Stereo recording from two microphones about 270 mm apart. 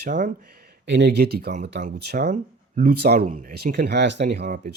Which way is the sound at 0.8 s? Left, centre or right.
Right.